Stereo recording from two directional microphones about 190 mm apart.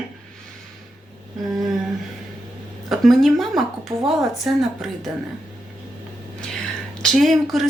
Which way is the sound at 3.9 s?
30° right (ahead or behind).